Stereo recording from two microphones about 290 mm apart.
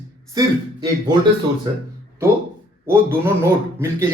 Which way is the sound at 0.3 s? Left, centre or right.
Centre.